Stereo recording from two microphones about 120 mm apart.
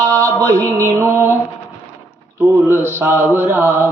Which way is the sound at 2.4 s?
20° right (ahead or behind).